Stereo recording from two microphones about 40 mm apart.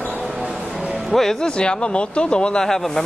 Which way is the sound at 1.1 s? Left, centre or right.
Centre.